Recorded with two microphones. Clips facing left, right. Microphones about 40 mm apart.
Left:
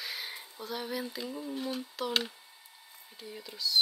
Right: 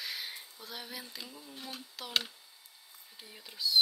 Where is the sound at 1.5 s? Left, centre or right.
Centre.